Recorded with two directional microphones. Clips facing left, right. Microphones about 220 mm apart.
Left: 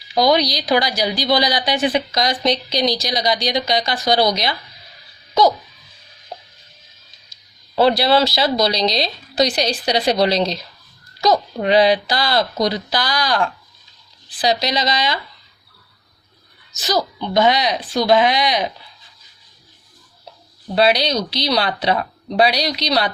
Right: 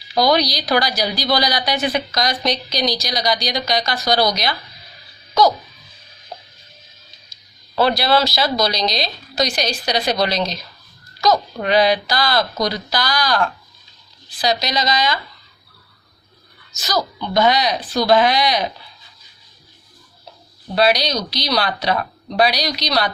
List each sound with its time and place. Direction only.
0.1 s speech: 20° left (ahead or behind)
7.8 s speech: 30° left (ahead or behind)
16.7 s speech: 30° left (ahead or behind)
20.7 s speech: 25° left (ahead or behind)